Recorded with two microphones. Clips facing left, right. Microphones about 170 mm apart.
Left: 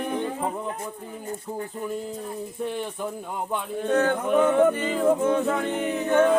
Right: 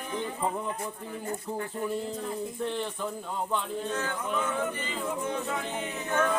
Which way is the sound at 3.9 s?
60° left (ahead or behind).